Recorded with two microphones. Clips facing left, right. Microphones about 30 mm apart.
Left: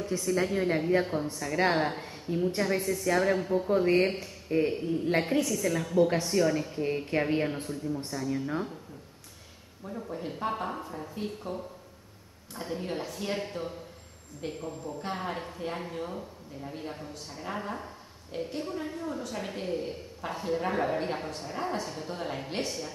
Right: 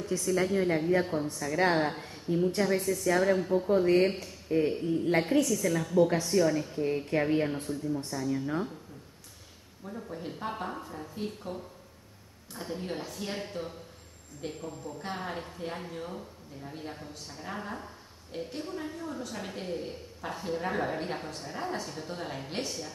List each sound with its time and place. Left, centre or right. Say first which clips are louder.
0.0 s a woman's voice: even; centre
3.7 s speech: even; left
5.5 s speech: right 1 dB; centre
9.8 s speech: left 2 dB; centre